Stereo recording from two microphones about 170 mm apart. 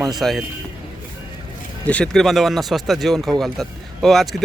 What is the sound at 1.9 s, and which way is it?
Speech, 5° left (ahead or behind).